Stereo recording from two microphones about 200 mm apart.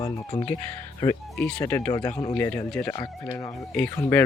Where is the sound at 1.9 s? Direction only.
20° left (ahead or behind).